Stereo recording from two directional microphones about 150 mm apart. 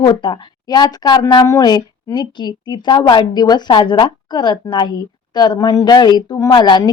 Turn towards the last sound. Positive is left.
turn(degrees=30)  # may be behind; listen again after turning